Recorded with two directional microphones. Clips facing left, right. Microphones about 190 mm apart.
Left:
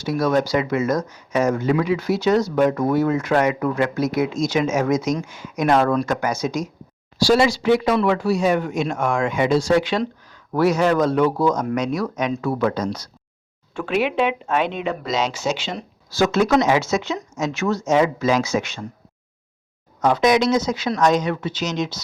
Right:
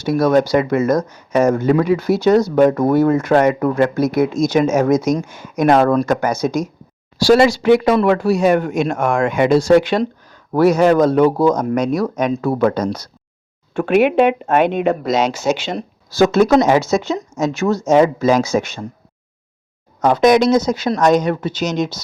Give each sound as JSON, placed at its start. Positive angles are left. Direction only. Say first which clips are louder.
{"t": 0.0, "sound": "speech", "louder": "right 5 dB", "side_deg": -55}
{"t": 5.3, "sound": "speech", "louder": "right 5 dB", "side_deg": -55}
{"t": 7.2, "sound": "speech", "louder": "right 5 dB", "side_deg": -70}
{"t": 10.0, "sound": "speech", "louder": "right 5 dB", "side_deg": -45}
{"t": 11.8, "sound": "speech", "louder": "right 5 dB", "side_deg": -55}
{"t": 12.5, "sound": "speech", "louder": "right 5 dB", "side_deg": -55}
{"t": 16.4, "sound": "speech", "louder": "right 4 dB", "side_deg": -40}
{"t": 20.0, "sound": "speech", "louder": "right 5 dB", "side_deg": -45}